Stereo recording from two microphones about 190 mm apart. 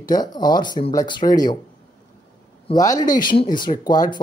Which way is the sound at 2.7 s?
20° left (ahead or behind).